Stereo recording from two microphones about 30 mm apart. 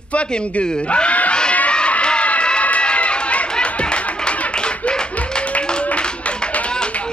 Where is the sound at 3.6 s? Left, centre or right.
Left.